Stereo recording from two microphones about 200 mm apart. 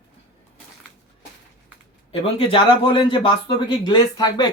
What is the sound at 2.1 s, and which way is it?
A man's voice, 25° left (ahead or behind).